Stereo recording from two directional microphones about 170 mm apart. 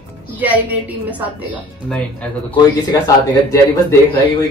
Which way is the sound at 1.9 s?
10° left (ahead or behind).